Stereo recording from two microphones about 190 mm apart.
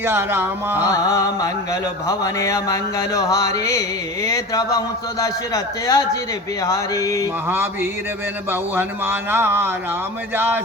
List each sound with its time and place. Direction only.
0.0 s speech: 10° right (ahead or behind)
0.9 s a sound: 15° left (ahead or behind)
7.4 s speech: 10° right (ahead or behind)